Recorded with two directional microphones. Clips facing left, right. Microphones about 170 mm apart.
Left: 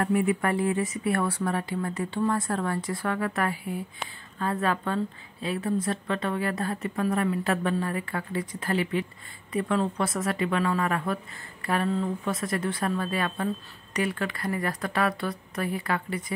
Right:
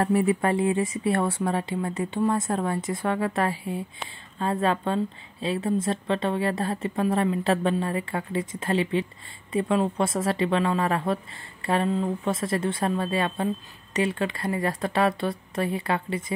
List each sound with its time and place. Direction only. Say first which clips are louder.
0.0 s speech: right 2 dB; 30° right (ahead or behind)